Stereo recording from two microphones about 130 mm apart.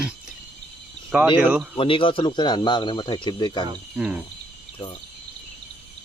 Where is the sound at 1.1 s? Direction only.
15° right (ahead or behind).